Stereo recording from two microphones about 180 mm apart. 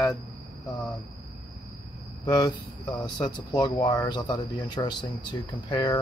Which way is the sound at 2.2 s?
25° left (ahead or behind).